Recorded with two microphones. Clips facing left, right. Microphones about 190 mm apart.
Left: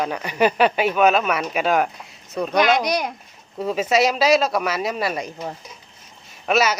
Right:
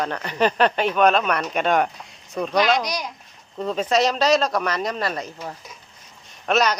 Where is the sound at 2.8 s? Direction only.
55° left (ahead or behind).